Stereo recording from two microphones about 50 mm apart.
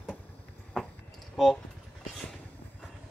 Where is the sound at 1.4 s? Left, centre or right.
Centre.